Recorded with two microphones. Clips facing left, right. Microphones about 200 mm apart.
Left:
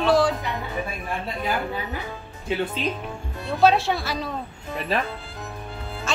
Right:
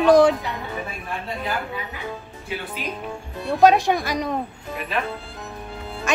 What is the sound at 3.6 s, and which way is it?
Speech, 15° right (ahead or behind).